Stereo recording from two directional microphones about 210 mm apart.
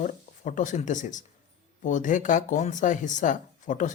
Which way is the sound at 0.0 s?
35° left (ahead or behind).